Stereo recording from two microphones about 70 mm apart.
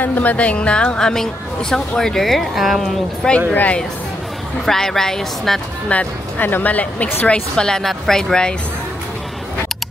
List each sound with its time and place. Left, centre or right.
0.0 s a woman's voice: left; by 2.9 s centre
3.5 s speech: left
4.6 s a woman's voice: centre
5.9 s speech: left
7.2 s a woman's voice: centre